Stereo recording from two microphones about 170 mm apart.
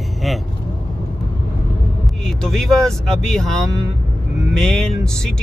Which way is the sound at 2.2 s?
5° left (ahead or behind).